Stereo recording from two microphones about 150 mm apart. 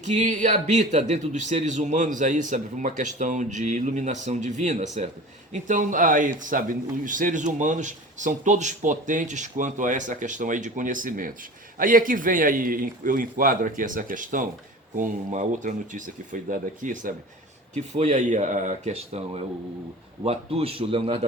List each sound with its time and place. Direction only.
0.1 s a man's voice: 55° right (ahead or behind)
17.7 s a man's voice: 50° right (ahead or behind)